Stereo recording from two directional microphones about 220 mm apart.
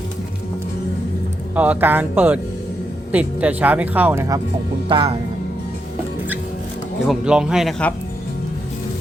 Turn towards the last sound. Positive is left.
turn(degrees=5)  # may be behind; listen again after turning